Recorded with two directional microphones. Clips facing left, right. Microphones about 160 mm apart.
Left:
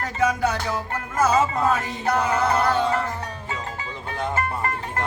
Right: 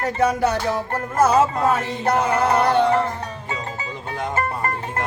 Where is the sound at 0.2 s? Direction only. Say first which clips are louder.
Right 2 dB; 35° right (ahead or behind).